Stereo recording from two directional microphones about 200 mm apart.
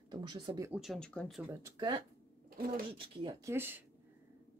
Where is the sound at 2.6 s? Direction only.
45° right (ahead or behind).